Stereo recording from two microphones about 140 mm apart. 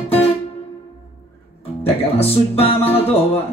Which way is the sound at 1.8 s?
45° left (ahead or behind).